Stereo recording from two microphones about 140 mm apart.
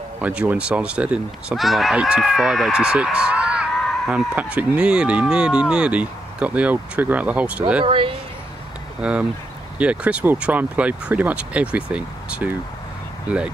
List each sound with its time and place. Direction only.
0.2 s speech: 10° right (ahead or behind)
7.8 s speech: 35° right (ahead or behind)
9.0 s speech: 10° right (ahead or behind)